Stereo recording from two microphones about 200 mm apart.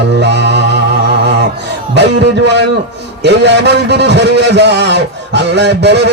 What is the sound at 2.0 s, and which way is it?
A man's voice, 60° right (ahead or behind).